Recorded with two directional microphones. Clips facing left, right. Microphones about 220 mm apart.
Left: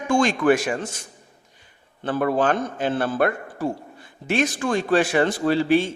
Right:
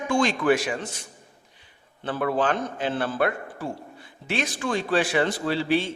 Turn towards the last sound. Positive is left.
turn(degrees=45)  # may be behind; listen again after turning